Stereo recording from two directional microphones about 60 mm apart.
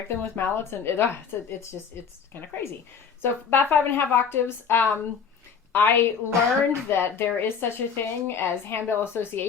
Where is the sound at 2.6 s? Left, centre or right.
Left.